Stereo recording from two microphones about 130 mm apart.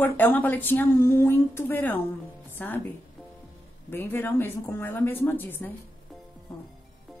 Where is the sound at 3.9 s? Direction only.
15° left (ahead or behind).